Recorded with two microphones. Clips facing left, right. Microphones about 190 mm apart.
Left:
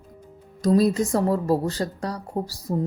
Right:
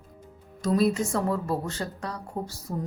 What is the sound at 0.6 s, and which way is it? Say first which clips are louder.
Speech: left 4 dB; 40° left (ahead or behind).